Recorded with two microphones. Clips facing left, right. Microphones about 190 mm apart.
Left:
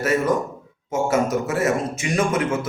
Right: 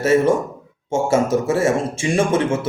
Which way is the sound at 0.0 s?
25° right (ahead or behind).